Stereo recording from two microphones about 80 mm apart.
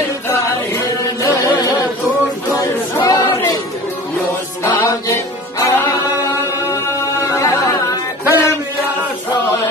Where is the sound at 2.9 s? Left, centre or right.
Left.